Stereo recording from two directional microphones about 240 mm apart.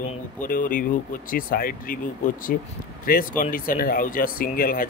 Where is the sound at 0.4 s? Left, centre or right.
Left.